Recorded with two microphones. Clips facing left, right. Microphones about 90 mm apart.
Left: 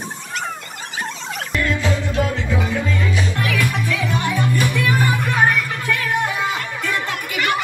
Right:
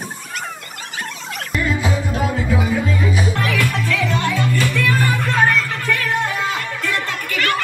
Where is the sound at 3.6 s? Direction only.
15° left (ahead or behind).